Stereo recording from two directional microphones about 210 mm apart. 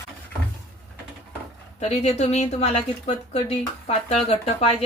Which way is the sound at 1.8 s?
30° left (ahead or behind).